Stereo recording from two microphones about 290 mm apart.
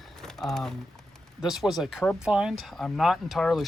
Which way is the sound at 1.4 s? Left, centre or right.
Centre.